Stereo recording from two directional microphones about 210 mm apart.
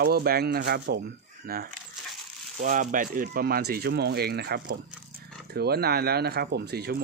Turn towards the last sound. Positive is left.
turn(degrees=-50)  # may be behind; listen again after turning